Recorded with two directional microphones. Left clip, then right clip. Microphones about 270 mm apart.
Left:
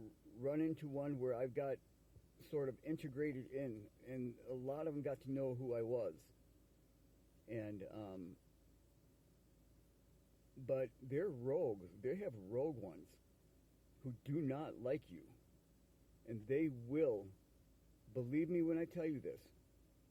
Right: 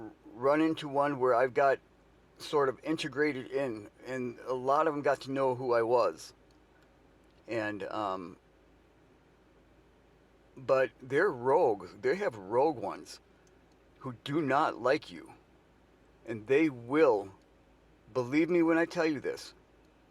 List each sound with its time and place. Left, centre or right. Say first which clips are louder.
0.0 s speech: right 14 dB; left
7.4 s speech: right 14 dB; left
10.8 s speech: right 14 dB; left
14.0 s speech: right 11 dB; left
16.2 s speech: right 13 dB; left